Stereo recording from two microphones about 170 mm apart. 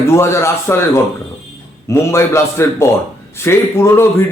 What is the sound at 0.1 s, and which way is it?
A man's voice, 15° left (ahead or behind).